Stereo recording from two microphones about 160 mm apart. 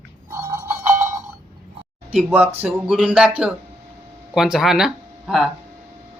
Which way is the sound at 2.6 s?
5° right (ahead or behind).